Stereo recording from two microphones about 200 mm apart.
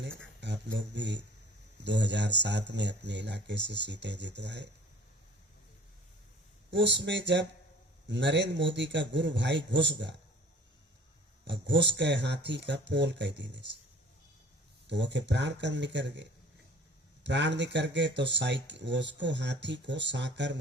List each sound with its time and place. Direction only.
0.4 s speech: 60° right (ahead or behind)
6.7 s speech: 60° right (ahead or behind)
11.4 s speech: 60° right (ahead or behind)
14.8 s speech: 60° right (ahead or behind)